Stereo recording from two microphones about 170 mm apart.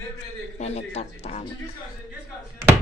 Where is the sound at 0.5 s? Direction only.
40° left (ahead or behind).